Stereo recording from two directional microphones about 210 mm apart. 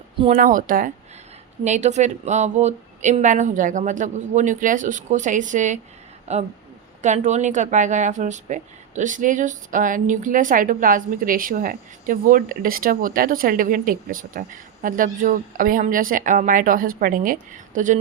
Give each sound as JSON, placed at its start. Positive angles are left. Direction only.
{"t": 0.3, "sound": "speech", "side_deg": -40}